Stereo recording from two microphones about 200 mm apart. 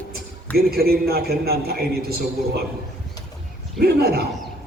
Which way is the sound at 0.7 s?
50° right (ahead or behind).